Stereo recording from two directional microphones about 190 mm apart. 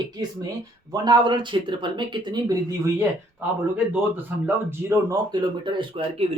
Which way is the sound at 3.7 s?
10° right (ahead or behind).